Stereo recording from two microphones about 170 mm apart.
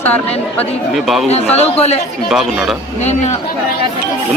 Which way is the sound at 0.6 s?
Centre (ahead or behind).